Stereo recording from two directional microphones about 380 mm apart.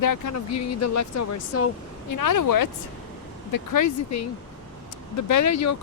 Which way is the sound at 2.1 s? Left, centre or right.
Left.